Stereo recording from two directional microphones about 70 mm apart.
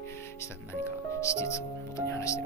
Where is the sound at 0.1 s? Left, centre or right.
Left.